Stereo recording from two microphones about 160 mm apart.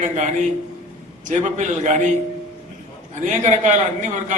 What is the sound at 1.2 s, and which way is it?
Speech, 50° right (ahead or behind).